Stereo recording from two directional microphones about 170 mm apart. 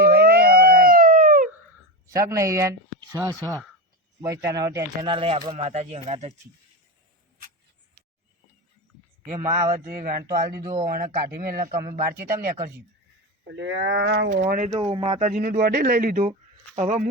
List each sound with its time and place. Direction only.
0.0 s a sound: 60° right (ahead or behind)
2.0 s speech: 20° right (ahead or behind)
5.1 s speech: 30° right (ahead or behind)
9.6 s speech: 50° right (ahead or behind)
10.2 s speech: 20° right (ahead or behind)
10.8 s speech: 55° right (ahead or behind)
13.5 s speech: 90° right
14.1 s speech: 70° right (ahead or behind)
14.8 s speech: 30° right (ahead or behind)
15.3 s speech: 50° right (ahead or behind)